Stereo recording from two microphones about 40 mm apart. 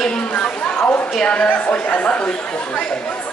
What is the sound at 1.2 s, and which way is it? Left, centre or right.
Speech, left.